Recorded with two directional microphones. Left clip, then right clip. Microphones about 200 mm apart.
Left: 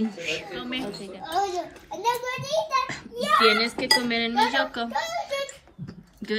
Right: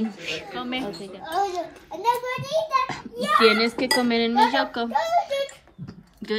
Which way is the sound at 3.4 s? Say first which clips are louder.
Right 4 dB; 25° right (ahead or behind).